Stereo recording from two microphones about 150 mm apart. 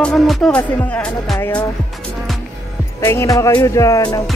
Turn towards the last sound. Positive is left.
turn(degrees=25)  # may be behind; listen again after turning